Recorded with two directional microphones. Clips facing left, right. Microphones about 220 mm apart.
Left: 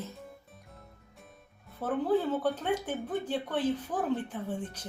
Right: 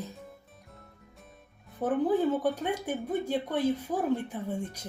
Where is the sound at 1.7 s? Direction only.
15° right (ahead or behind).